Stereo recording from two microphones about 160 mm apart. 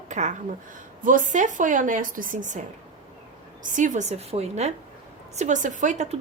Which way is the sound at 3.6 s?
55° right (ahead or behind).